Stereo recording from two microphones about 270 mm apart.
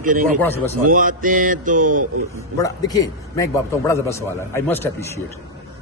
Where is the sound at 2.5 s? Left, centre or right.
Centre.